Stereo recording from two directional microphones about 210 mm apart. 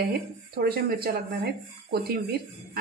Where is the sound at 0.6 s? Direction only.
50° right (ahead or behind).